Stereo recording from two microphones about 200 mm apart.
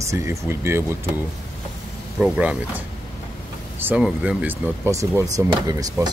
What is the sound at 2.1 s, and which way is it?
Speech, 5° right (ahead or behind).